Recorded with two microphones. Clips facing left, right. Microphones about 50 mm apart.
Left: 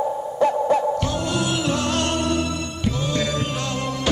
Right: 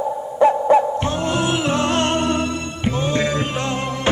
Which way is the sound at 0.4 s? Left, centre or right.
Right.